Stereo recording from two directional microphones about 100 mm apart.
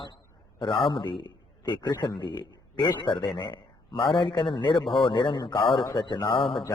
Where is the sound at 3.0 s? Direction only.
55° left (ahead or behind).